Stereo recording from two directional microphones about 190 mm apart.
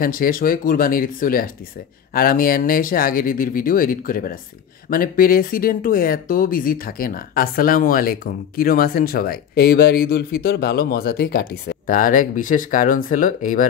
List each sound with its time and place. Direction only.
0.0 s speech: 50° left (ahead or behind)